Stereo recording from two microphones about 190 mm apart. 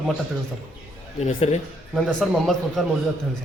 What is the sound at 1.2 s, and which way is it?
Speech, 35° left (ahead or behind).